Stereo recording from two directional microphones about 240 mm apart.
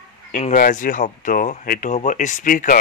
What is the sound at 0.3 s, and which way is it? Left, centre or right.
A man's voice, left.